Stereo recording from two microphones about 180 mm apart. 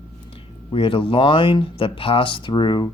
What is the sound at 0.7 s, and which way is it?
Speech, 30° left (ahead or behind).